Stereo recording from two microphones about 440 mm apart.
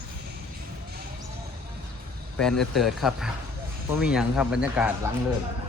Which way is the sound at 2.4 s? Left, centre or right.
Centre.